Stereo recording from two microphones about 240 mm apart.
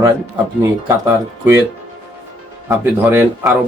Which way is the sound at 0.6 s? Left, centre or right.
Centre.